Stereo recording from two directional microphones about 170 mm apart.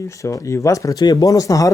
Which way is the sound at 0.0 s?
20° left (ahead or behind).